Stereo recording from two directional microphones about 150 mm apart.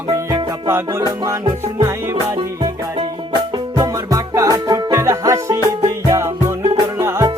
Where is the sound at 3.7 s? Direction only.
20° right (ahead or behind).